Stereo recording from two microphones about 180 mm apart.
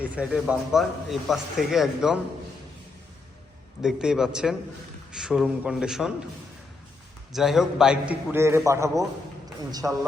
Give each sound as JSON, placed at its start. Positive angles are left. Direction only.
{"t": 0.0, "sound": "a man's voice", "side_deg": -5}
{"t": 3.8, "sound": "a man's voice", "side_deg": -5}
{"t": 7.3, "sound": "a man's voice", "side_deg": 0}